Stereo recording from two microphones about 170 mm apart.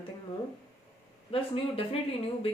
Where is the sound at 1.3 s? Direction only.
35° left (ahead or behind).